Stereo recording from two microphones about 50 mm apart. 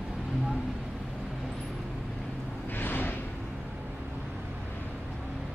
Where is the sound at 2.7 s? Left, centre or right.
Left.